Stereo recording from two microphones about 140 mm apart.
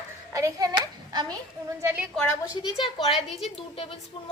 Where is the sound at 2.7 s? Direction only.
35° left (ahead or behind).